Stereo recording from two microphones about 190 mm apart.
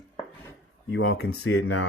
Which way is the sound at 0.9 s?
90° left.